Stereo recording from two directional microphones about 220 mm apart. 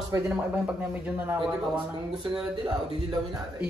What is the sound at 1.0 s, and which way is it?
Speech, 5° right (ahead or behind).